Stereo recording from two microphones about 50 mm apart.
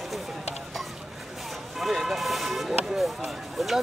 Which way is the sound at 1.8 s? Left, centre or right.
Centre.